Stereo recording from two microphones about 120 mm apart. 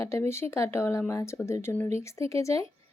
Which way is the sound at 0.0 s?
20° left (ahead or behind).